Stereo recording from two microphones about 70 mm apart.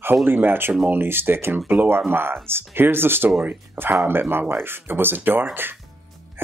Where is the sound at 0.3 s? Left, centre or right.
Right.